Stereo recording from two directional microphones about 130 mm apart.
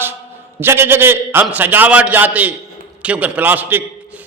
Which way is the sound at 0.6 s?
15° right (ahead or behind).